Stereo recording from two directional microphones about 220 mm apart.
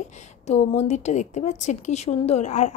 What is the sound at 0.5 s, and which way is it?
A woman's voice, 30° left (ahead or behind).